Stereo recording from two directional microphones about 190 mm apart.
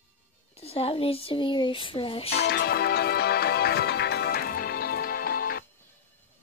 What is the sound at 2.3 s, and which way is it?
Music, 65° left (ahead or behind).